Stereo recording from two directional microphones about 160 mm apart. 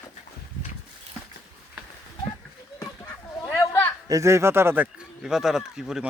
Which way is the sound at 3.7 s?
15° left (ahead or behind).